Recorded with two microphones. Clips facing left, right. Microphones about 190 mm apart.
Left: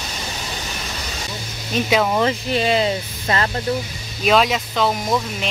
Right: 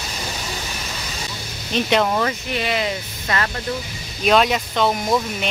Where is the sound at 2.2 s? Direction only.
30° left (ahead or behind).